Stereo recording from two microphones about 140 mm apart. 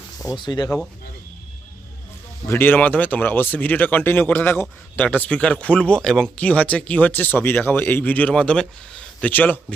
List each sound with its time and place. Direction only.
0.3 s speech: 30° left (ahead or behind)
2.5 s speech: 15° left (ahead or behind)